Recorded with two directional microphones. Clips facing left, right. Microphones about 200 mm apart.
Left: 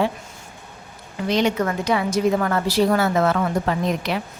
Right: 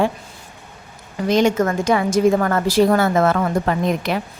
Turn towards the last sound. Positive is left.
turn(degrees=-50)  # may be behind; listen again after turning